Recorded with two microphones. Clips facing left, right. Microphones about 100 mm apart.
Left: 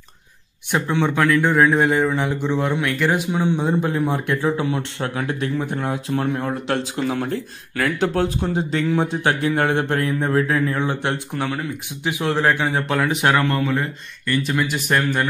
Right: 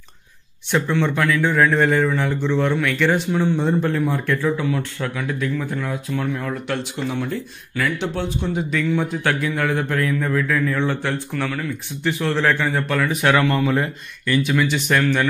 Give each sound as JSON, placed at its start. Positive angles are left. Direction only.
{"t": 0.7, "sound": "speech", "side_deg": 10}
{"t": 7.1, "sound": "speech", "side_deg": 45}
{"t": 9.4, "sound": "speech", "side_deg": 35}
{"t": 10.8, "sound": "speech", "side_deg": 20}
{"t": 13.3, "sound": "speech", "side_deg": 0}